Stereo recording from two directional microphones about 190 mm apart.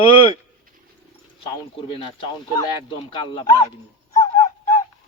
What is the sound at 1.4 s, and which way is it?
Speech, 30° left (ahead or behind).